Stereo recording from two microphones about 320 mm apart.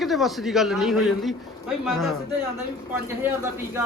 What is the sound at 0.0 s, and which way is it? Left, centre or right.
A man's voice, centre.